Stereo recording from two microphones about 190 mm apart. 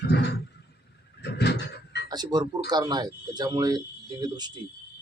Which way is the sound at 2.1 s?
20° right (ahead or behind).